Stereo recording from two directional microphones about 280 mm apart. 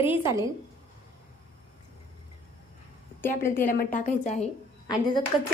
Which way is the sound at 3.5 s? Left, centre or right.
Left.